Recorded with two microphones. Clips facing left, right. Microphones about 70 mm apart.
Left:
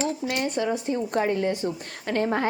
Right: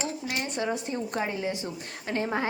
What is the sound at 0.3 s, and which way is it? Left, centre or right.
Speech, left.